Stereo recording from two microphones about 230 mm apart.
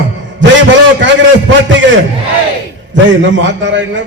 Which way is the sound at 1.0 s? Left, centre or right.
Right.